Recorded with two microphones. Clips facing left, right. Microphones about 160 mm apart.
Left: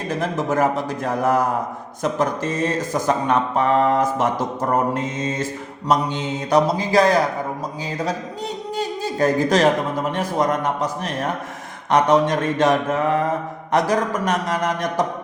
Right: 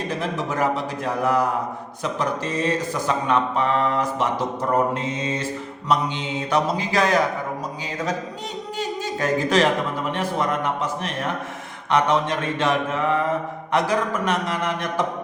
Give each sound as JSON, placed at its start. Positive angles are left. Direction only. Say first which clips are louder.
{"t": 0.2, "sound": "mantra", "louder": "left 6 dB", "side_deg": 45}
{"t": 8.8, "sound": "a sound", "louder": "left 5 dB", "side_deg": 40}
{"t": 10.1, "sound": "mantra", "louder": "left 3 dB", "side_deg": 40}